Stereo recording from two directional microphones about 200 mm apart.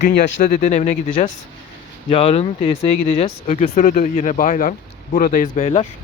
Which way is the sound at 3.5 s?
40° left (ahead or behind).